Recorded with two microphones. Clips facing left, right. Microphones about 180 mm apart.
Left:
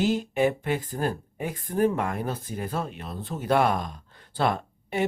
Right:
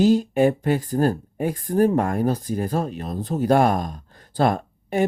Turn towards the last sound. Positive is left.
turn(degrees=-45)  # may be behind; listen again after turning